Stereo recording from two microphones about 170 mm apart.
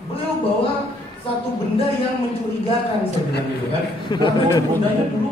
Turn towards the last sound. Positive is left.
turn(degrees=25)  # may be behind; listen again after turning